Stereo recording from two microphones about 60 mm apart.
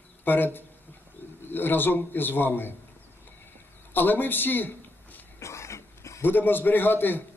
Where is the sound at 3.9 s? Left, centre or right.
Left.